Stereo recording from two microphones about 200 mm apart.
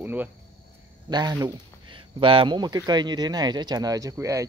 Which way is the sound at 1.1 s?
20° right (ahead or behind).